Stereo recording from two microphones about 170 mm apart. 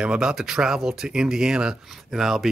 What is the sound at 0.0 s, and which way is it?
Speech, 5° right (ahead or behind).